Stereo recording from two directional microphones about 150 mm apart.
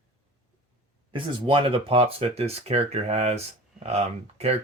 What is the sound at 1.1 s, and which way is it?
Speech, 35° right (ahead or behind).